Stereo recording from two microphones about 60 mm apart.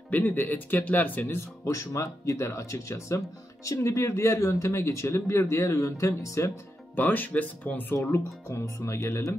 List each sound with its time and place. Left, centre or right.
0.1 s speech: left
1.6 s speech: left
7.0 s speech: left
7.9 s speech: left